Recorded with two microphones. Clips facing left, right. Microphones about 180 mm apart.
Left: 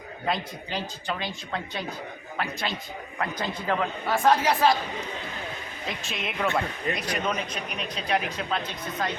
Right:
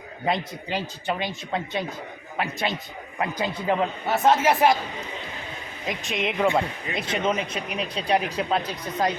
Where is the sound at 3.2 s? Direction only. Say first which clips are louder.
Right 4 dB; 15° right (ahead or behind).